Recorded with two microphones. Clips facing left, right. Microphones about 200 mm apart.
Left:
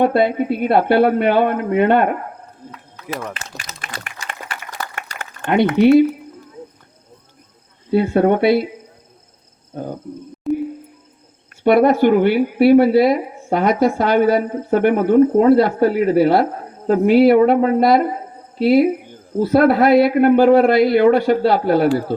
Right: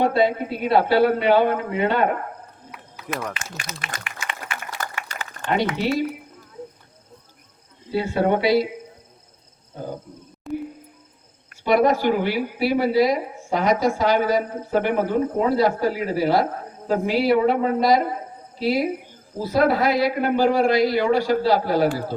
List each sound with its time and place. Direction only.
0.1 s speech: 60° left (ahead or behind)
3.8 s a sound: 40° left (ahead or behind)
4.9 s a sound: 55° left (ahead or behind)
7.9 s speech: 55° left (ahead or behind)
9.7 s hoot: 55° left (ahead or behind)
10.5 s cricket: centre (ahead or behind)
11.6 s speech: 60° left (ahead or behind)